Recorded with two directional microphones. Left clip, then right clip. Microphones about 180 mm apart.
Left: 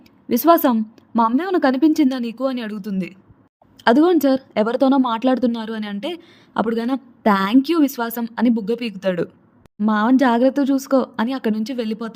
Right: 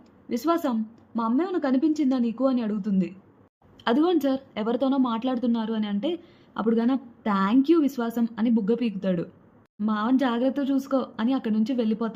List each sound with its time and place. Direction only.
0.3 s a woman's voice: 45° left (ahead or behind)
3.8 s speech: 35° left (ahead or behind)